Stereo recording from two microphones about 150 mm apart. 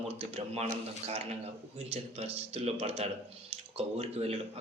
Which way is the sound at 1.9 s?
45° right (ahead or behind).